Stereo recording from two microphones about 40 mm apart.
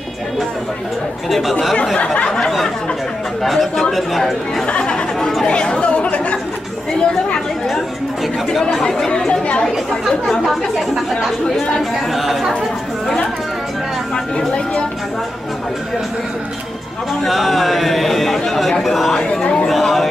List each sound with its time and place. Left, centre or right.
1.3 s speech: centre
2.2 s a sound: centre
3.4 s speech: centre
4.6 s a woman's voice: left
8.8 s a sound: centre
9.3 s a woman's voice: left
12.1 s speech: centre
17.2 s speech: centre
18.9 s a sound: centre
19.4 s a woman's voice: left
19.7 s speech: centre